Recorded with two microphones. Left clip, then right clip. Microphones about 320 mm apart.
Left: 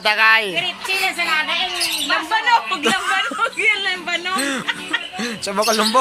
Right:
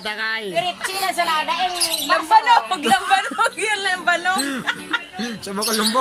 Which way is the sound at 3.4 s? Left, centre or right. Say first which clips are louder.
Left 2 dB; right.